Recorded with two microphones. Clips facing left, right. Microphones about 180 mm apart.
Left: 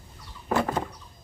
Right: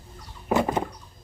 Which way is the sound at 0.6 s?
20° right (ahead or behind).